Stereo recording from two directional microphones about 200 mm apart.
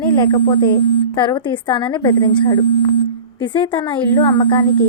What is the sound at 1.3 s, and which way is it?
Speech, 25° left (ahead or behind).